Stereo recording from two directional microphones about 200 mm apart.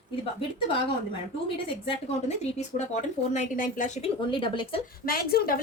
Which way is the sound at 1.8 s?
30° left (ahead or behind).